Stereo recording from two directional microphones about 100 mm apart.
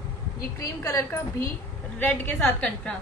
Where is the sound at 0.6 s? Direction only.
30° left (ahead or behind).